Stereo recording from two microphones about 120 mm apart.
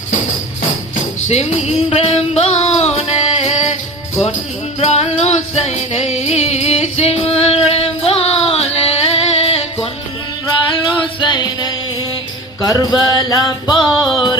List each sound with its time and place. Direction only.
1.3 s music: 65° left (ahead or behind)
4.8 s music: 65° left (ahead or behind)
11.0 s music: 40° left (ahead or behind)
13.8 s music: 5° right (ahead or behind)